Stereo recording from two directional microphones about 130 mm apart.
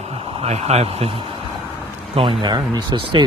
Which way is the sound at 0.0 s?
50° right (ahead or behind).